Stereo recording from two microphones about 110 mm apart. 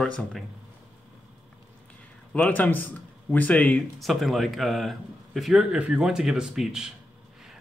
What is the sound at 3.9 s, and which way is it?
A man's voice, centre (ahead or behind).